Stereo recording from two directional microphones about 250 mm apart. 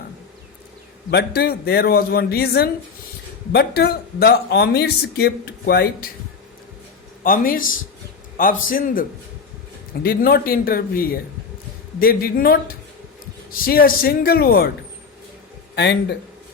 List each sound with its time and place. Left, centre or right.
1.1 s speech: left
7.3 s speech: left
15.7 s speech: left